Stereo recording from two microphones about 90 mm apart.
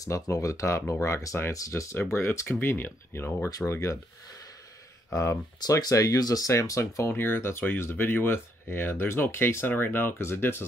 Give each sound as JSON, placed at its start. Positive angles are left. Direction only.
{"t": 0.0, "sound": "speech", "side_deg": 40}
{"t": 3.4, "sound": "speech", "side_deg": 40}
{"t": 5.1, "sound": "speech", "side_deg": 40}